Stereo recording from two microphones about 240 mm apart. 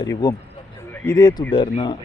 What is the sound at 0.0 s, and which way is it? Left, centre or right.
A man's voice, centre.